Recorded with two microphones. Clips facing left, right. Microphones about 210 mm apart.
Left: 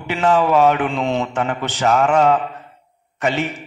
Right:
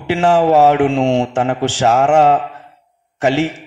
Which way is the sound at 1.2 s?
30° right (ahead or behind).